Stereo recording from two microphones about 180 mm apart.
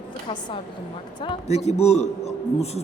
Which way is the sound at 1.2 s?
35° left (ahead or behind).